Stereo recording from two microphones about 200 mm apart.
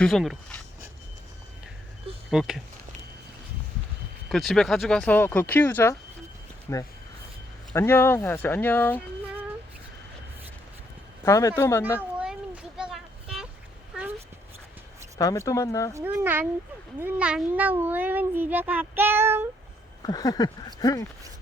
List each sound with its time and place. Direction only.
0.0 s speech: centre (ahead or behind)
2.3 s speech: 5° right (ahead or behind)
4.3 s speech: centre (ahead or behind)
11.3 s speech: 15° left (ahead or behind)
11.9 s a sound: 5° right (ahead or behind)
15.2 s speech: 15° left (ahead or behind)
15.9 s speech: 15° right (ahead or behind)
20.1 s a sound: 20° left (ahead or behind)